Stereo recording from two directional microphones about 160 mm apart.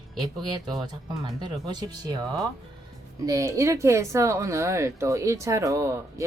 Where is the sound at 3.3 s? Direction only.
20° right (ahead or behind).